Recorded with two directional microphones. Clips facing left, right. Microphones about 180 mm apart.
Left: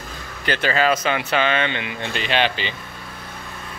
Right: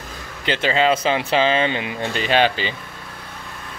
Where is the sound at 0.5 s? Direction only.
20° right (ahead or behind); by 2.5 s 40° right (ahead or behind).